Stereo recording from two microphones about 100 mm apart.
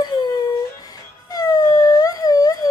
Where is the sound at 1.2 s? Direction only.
40° left (ahead or behind).